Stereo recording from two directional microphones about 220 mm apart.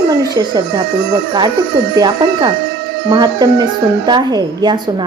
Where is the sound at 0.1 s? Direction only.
15° right (ahead or behind).